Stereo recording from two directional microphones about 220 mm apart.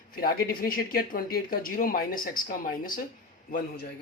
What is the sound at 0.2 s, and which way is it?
Speech, 45° left (ahead or behind).